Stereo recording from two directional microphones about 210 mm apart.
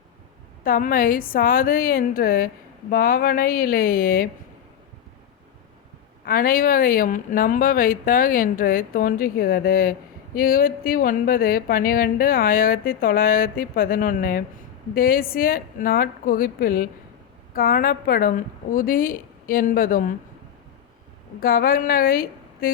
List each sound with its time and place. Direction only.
0.6 s a woman's voice: 40° left (ahead or behind)
6.2 s a woman's voice: 45° left (ahead or behind)
21.4 s a woman's voice: 45° left (ahead or behind)